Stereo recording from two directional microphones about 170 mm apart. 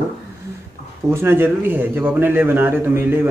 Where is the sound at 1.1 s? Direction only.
15° right (ahead or behind).